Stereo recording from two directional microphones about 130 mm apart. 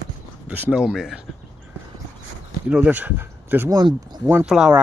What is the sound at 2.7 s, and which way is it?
Speech, 10° right (ahead or behind).